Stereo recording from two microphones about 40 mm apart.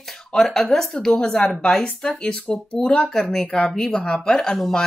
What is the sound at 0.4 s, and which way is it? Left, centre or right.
Speech, centre.